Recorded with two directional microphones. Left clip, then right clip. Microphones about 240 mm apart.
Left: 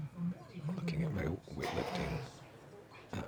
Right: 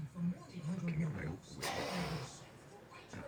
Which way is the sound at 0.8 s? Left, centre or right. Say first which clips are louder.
Left 6 dB; left.